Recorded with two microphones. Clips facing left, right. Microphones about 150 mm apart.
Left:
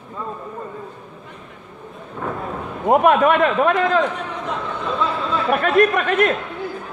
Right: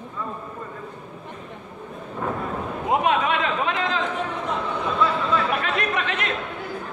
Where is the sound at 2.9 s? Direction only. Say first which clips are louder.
Left 7 dB; 50° left (ahead or behind).